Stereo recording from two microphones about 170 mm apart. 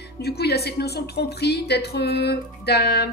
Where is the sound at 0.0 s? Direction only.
70° left (ahead or behind).